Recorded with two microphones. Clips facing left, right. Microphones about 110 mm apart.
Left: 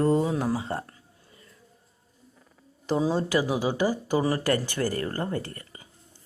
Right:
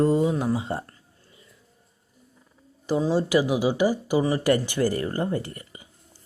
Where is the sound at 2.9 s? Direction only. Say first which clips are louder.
Right 2 dB; 5° right (ahead or behind).